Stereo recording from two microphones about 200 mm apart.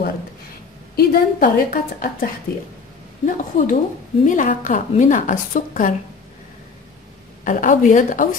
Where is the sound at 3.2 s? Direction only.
40° left (ahead or behind).